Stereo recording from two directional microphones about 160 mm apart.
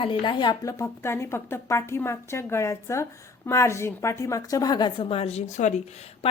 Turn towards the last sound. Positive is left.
turn(degrees=40)  # may be behind; listen again after turning